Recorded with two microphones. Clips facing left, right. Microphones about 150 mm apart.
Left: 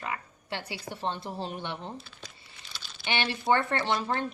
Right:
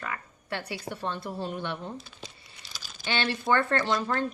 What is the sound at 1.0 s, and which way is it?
Speech, 20° left (ahead or behind).